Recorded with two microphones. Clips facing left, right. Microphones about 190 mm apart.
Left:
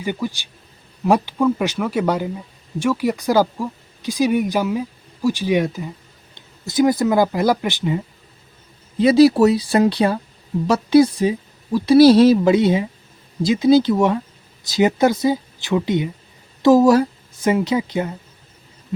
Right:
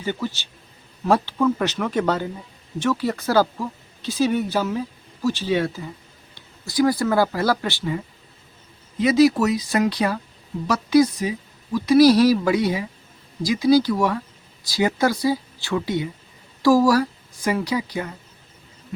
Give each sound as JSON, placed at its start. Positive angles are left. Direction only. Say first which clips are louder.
{"t": 0.0, "sound": "speech", "louder": "left 2 dB", "side_deg": 10}
{"t": 9.0, "sound": "a woman's voice", "louder": "left 5 dB", "side_deg": 30}